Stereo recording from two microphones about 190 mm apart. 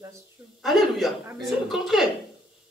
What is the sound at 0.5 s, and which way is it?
A man's voice, centre (ahead or behind).